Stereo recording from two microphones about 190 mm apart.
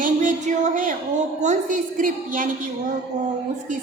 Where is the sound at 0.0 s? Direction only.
40° right (ahead or behind).